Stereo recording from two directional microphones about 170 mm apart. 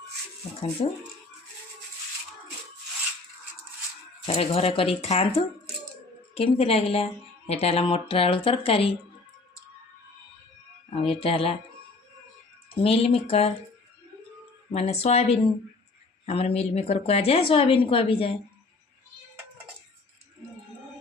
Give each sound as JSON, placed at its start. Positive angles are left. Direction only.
{"t": 0.8, "sound": "speech", "side_deg": 35}
{"t": 4.3, "sound": "speech", "side_deg": 35}
{"t": 10.9, "sound": "speech", "side_deg": 35}
{"t": 12.8, "sound": "speech", "side_deg": 35}
{"t": 14.7, "sound": "speech", "side_deg": 40}